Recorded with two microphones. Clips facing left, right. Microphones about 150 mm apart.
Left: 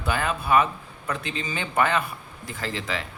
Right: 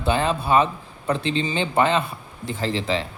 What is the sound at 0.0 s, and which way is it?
A man's voice, 25° right (ahead or behind).